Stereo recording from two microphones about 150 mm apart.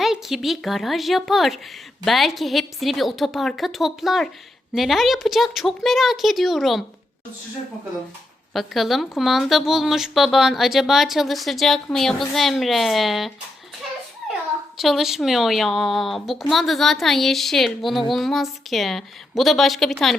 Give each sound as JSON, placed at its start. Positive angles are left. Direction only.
{"t": 0.0, "sound": "a woman's voice", "side_deg": 0}
{"t": 8.5, "sound": "a woman's voice", "side_deg": 0}
{"t": 14.8, "sound": "a woman's voice", "side_deg": 0}